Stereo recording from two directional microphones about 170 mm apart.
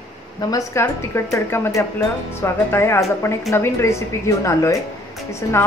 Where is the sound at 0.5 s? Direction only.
15° left (ahead or behind).